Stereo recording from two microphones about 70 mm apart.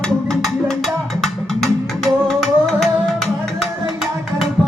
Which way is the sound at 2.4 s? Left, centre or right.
Centre.